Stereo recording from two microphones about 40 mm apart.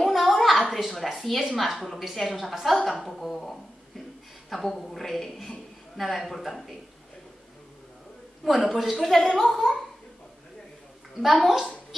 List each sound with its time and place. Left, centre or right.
0.0 s a sound: centre
1.0 s a woman's voice: centre
8.4 s a woman's voice: centre
11.1 s a woman's voice: centre